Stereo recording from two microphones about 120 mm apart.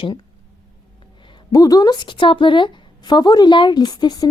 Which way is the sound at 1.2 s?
35° left (ahead or behind).